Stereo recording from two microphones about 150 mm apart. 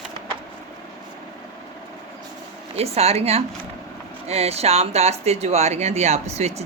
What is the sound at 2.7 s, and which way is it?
Speech, 45° right (ahead or behind).